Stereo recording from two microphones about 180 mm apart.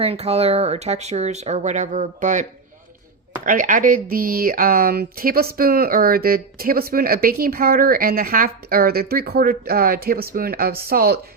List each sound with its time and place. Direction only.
0.0 s speech: 35° right (ahead or behind); by 11.2 s 60° right (ahead or behind)